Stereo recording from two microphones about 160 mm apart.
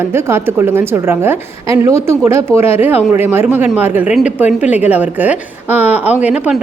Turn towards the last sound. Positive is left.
turn(degrees=-10)  # may be behind; listen again after turning